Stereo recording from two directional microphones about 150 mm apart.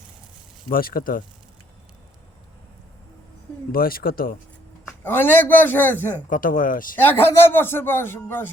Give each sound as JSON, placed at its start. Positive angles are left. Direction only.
{"t": 0.7, "sound": "speech", "side_deg": 75}
{"t": 3.7, "sound": "speech", "side_deg": 75}
{"t": 5.0, "sound": "a man's voice", "side_deg": 15}
{"t": 6.3, "sound": "speech", "side_deg": 65}
{"t": 6.9, "sound": "a man's voice", "side_deg": 15}